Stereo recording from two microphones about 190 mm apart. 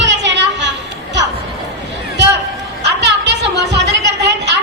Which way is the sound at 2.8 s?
65° right (ahead or behind).